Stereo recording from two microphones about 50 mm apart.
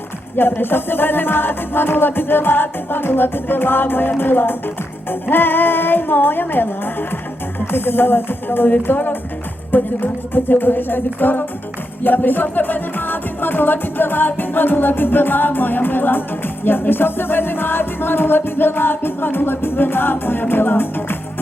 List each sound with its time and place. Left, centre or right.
0.3 s music: left